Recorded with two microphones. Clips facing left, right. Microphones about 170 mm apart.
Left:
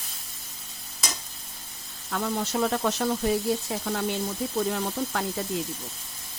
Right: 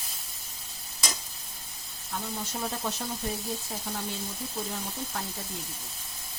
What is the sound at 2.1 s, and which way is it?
Speech, 90° left.